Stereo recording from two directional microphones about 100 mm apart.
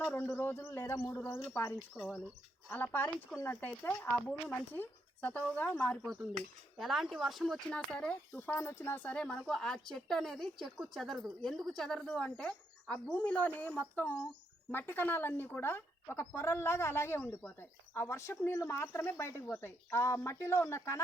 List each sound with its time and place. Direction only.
0.2 s speech: 25° left (ahead or behind); by 6.1 s 10° left (ahead or behind)
6.7 s speech: centre (ahead or behind)
7.7 s speech: 10° left (ahead or behind); by 21.0 s 30° left (ahead or behind)